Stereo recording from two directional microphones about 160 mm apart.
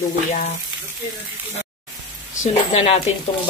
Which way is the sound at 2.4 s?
40° left (ahead or behind).